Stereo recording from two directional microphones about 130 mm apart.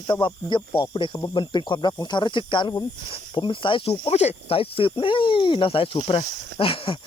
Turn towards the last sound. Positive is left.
turn(degrees=45)  # may be behind; listen again after turning